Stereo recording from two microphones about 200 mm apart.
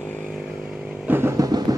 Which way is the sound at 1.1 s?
10° right (ahead or behind).